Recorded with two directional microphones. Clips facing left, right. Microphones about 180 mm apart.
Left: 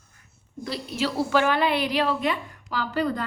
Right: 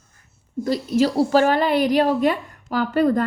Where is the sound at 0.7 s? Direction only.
40° right (ahead or behind).